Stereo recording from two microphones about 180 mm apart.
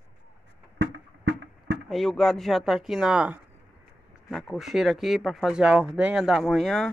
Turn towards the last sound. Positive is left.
turn(degrees=0)  # may be behind; listen again after turning